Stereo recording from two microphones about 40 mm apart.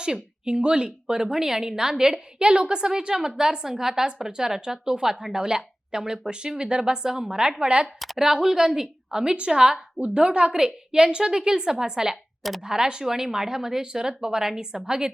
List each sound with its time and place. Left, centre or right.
0.0 s a woman's voice: centre
8.2 s a woman's voice: centre